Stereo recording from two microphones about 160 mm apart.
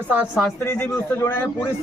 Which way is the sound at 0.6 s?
20° left (ahead or behind).